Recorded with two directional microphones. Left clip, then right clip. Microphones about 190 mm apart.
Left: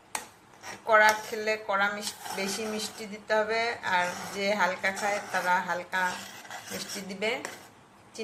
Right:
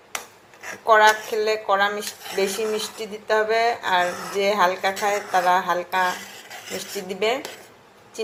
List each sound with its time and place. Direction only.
0.9 s speech: 20° right (ahead or behind)